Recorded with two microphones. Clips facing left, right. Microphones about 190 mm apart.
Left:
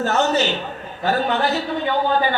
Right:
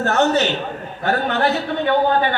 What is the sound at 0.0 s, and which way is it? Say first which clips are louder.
Speech: right 2 dB; 60° right (ahead or behind).